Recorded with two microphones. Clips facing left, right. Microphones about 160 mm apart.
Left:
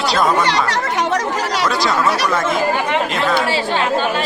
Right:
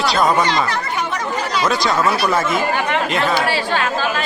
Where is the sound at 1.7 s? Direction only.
Centre (ahead or behind).